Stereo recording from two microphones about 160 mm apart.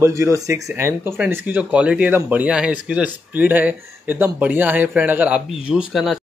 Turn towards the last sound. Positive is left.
turn(degrees=0)  # may be behind; listen again after turning